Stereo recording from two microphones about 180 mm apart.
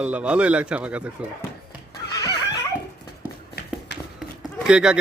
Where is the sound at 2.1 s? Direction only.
20° left (ahead or behind).